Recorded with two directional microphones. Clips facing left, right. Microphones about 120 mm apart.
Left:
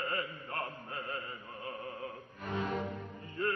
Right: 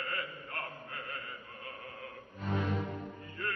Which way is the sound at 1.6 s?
25° left (ahead or behind).